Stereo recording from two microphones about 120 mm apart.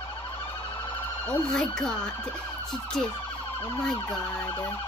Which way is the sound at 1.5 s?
5° left (ahead or behind).